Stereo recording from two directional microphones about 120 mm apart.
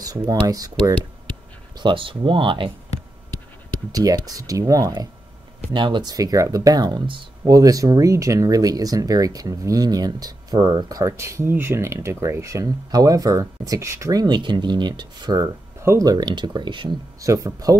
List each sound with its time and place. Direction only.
0.0 s speech: 30° right (ahead or behind)
1.8 s speech: 45° right (ahead or behind)
3.9 s speech: 30° right (ahead or behind)
5.7 s speech: 40° right (ahead or behind)
17.2 s speech: 30° right (ahead or behind)